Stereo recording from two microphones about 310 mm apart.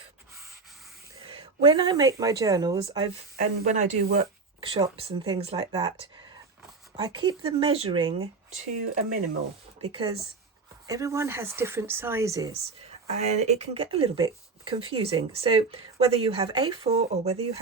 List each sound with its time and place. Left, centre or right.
1.2 s speech: centre
9.8 s speech: centre